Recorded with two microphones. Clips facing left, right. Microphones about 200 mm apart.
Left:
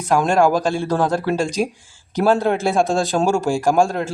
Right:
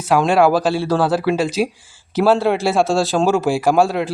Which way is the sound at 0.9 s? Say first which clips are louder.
Right 2 dB; 15° left (ahead or behind).